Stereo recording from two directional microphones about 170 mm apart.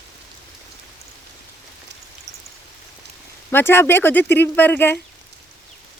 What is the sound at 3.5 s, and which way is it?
Speech, 15° left (ahead or behind).